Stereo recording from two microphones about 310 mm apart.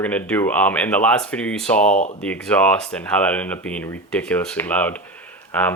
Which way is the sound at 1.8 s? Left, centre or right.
Left.